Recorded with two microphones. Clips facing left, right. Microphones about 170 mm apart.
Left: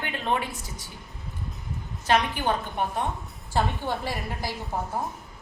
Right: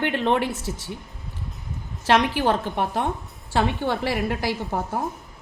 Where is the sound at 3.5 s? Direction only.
75° right (ahead or behind).